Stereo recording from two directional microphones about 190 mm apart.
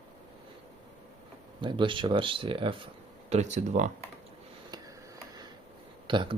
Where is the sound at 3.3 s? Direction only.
35° right (ahead or behind).